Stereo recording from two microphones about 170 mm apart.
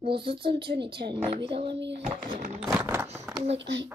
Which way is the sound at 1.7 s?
90° right.